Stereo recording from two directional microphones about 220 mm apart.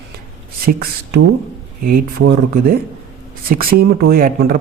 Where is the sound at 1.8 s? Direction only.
40° right (ahead or behind).